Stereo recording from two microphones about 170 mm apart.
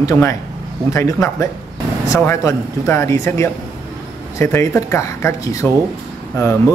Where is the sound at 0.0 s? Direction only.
15° left (ahead or behind).